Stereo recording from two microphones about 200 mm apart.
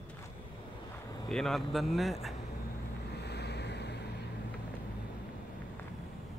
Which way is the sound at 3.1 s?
55° left (ahead or behind).